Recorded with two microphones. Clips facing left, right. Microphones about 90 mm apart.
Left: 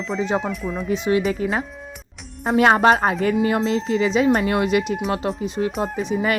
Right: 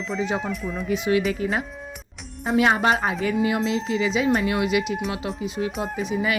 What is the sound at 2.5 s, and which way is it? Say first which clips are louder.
Speech: left 4 dB; 45° left (ahead or behind).